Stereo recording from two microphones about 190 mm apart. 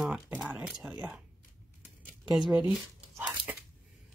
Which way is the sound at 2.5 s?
5° right (ahead or behind).